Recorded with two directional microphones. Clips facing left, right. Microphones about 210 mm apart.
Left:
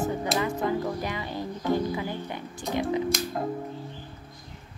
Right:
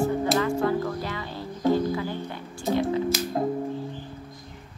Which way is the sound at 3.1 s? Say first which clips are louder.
Right 2 dB; 5° right (ahead or behind).